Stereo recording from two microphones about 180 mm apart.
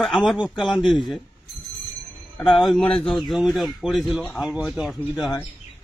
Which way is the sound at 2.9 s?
30° left (ahead or behind).